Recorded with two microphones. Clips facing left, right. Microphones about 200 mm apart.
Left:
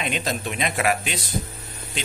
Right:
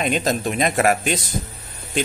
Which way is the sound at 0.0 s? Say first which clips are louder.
Right 6 dB; 45° right (ahead or behind).